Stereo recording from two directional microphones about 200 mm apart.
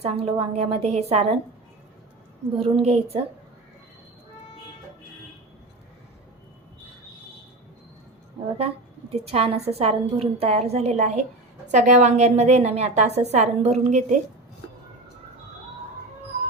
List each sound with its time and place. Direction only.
0.0 s a woman's voice: 30° right (ahead or behind)
2.6 s a woman's voice: 30° right (ahead or behind)
9.1 s a woman's voice: 30° right (ahead or behind)